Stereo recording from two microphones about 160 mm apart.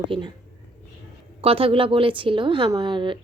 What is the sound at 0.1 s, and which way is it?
Speech, 35° right (ahead or behind).